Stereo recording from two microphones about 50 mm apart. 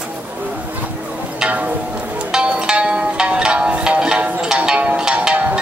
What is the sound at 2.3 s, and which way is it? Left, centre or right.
Music, centre.